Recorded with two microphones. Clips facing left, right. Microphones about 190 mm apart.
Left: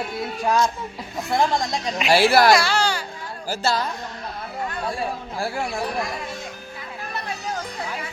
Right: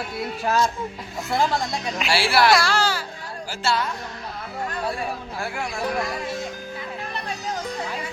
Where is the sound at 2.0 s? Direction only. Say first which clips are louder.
Left 5 dB; 45° left (ahead or behind).